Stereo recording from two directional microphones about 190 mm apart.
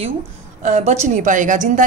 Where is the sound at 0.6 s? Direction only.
40° right (ahead or behind).